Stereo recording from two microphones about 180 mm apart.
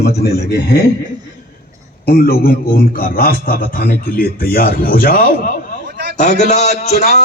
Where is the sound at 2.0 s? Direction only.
60° left (ahead or behind).